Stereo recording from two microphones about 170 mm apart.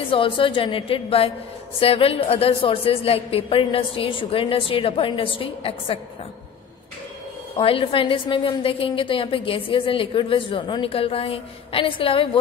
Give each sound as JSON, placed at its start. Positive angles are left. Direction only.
{"t": 0.1, "sound": "a woman's voice", "side_deg": 30}
{"t": 7.5, "sound": "a woman's voice", "side_deg": 35}